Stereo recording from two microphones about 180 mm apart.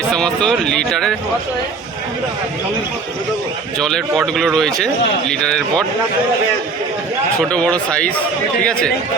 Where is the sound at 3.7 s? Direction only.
Centre (ahead or behind).